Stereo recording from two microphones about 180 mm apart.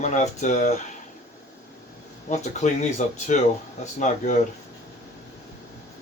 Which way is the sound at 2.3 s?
40° left (ahead or behind).